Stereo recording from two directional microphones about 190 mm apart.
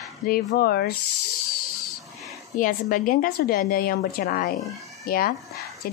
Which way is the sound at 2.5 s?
45° left (ahead or behind).